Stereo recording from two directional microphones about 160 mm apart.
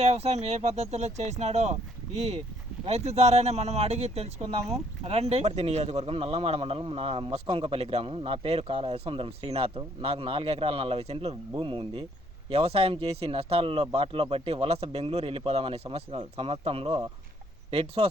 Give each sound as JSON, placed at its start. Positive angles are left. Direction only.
{"t": 0.0, "sound": "speech", "side_deg": -40}